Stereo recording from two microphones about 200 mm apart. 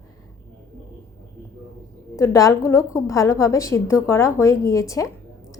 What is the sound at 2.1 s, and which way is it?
A woman's voice, 15° left (ahead or behind).